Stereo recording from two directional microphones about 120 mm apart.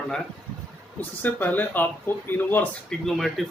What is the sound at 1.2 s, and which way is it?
Speech, 15° left (ahead or behind).